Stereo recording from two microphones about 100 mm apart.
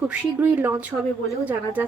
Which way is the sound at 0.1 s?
20° right (ahead or behind).